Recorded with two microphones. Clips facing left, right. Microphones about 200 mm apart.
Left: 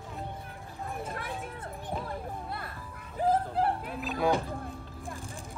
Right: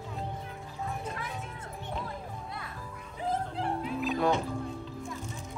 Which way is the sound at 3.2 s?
45° left (ahead or behind).